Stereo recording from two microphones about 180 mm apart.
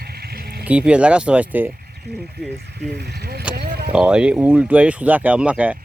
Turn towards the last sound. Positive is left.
turn(degrees=-10)  # may be behind; listen again after turning